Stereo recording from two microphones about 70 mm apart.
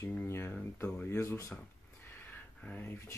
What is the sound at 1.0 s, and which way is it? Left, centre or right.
Speech, left.